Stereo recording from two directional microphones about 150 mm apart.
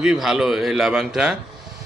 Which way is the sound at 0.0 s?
5° right (ahead or behind).